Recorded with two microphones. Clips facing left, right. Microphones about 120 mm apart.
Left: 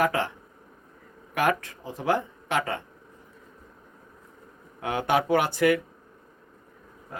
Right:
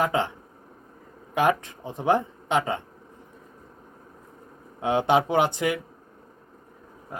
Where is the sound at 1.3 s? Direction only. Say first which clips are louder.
Right 2 dB; 20° right (ahead or behind).